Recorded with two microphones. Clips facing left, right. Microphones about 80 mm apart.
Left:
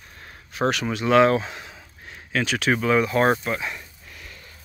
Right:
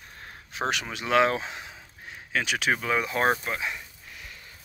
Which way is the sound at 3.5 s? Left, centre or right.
Centre.